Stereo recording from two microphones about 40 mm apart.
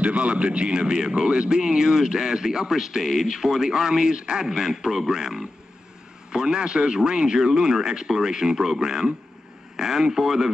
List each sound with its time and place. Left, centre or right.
0.0 s a man's voice: right
4.5 s a man's voice: centre